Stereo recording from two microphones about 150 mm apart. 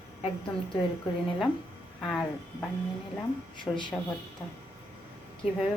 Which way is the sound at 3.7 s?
20° left (ahead or behind).